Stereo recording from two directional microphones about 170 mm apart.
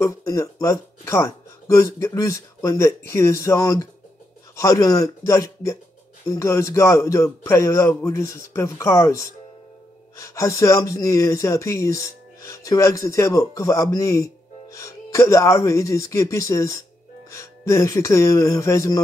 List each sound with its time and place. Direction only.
0.0 s speech: 20° left (ahead or behind)